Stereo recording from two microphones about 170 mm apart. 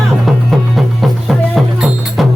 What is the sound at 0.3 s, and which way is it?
Music, centre (ahead or behind).